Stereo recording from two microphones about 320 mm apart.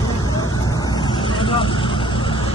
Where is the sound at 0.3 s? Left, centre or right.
Centre.